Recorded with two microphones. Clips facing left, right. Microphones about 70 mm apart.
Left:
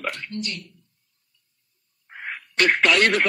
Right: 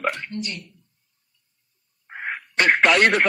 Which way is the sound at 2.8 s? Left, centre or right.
Centre.